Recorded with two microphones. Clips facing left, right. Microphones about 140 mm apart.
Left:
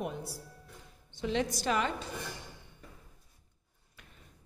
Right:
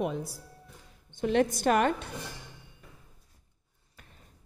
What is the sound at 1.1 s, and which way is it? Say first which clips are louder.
Speech: right 6 dB; 55° right (ahead or behind).